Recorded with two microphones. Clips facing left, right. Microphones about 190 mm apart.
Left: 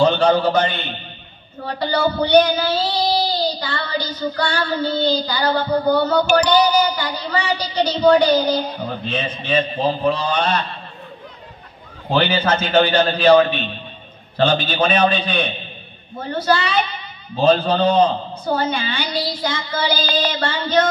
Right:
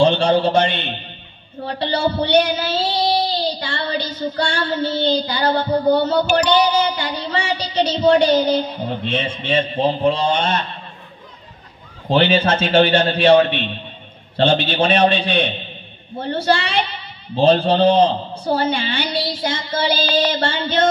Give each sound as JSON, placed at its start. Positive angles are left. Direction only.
{"t": 0.0, "sound": "a man's voice", "side_deg": -30}
{"t": 1.6, "sound": "child singing", "side_deg": -25}
{"t": 12.1, "sound": "child singing", "side_deg": -30}